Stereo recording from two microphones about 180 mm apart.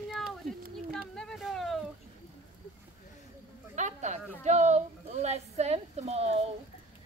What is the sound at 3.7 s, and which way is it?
A woman's voice, 40° right (ahead or behind).